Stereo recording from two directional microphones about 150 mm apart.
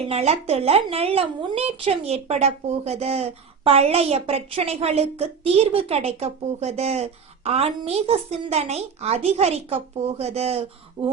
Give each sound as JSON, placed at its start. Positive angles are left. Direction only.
{"t": 0.1, "sound": "a woman's voice", "side_deg": -45}